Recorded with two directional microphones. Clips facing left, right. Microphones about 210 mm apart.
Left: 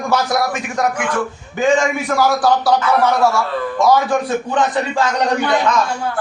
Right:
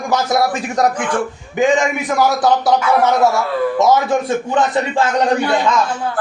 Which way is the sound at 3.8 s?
20° right (ahead or behind).